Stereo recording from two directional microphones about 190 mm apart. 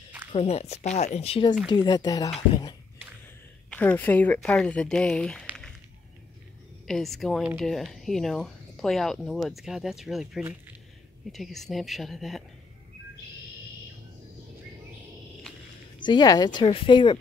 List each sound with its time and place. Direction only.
0.3 s speech: 35° left (ahead or behind)
1.7 s speech: 20° left (ahead or behind)
3.7 s speech: 10° left (ahead or behind)
6.9 s speech: centre (ahead or behind)
16.0 s speech: 20° left (ahead or behind)